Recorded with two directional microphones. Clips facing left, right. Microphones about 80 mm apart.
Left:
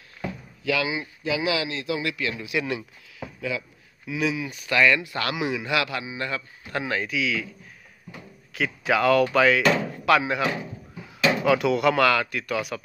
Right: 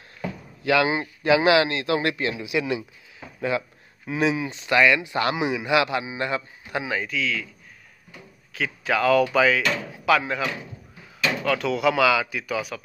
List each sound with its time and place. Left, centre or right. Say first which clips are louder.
0.7 s a man's voice: right 5 dB; right
1.2 s a man's voice: right 8 dB; right
2.0 s speech: right 4 dB; right
2.3 s speech: right 2 dB; centre
3.3 s speech: right 5 dB; right
4.0 s speech: right 3 dB; right
6.7 s speech: even; centre
7.1 s speech: left 1 dB; centre
8.5 s speech: left 1 dB; centre